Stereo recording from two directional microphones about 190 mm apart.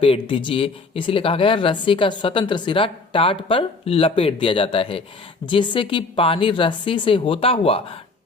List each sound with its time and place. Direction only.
0.0 s speech: 25° left (ahead or behind)